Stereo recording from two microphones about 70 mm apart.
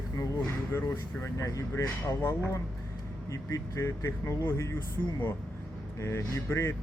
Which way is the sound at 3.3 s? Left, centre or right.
Left.